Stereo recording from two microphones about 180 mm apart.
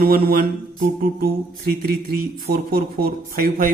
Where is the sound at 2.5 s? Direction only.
55° right (ahead or behind).